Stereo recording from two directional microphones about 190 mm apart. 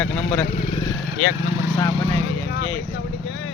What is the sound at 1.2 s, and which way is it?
Speech, 90° left.